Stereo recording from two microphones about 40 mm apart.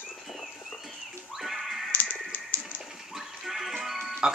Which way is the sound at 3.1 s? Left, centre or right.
Centre.